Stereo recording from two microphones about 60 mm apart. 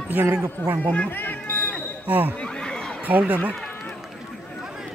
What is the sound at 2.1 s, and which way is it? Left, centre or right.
Speech, right.